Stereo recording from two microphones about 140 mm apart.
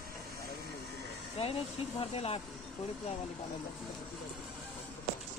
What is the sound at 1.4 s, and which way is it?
Speech, 45° left (ahead or behind).